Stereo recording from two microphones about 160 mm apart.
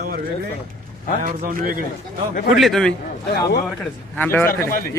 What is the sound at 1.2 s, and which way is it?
Speech, 60° right (ahead or behind).